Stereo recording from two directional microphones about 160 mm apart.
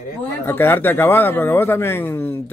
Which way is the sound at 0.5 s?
15° left (ahead or behind).